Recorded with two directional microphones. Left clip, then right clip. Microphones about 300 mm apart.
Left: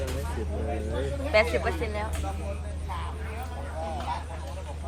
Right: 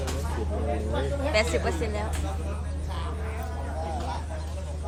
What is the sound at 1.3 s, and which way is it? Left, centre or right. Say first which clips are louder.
Speech: left 3 dB; centre.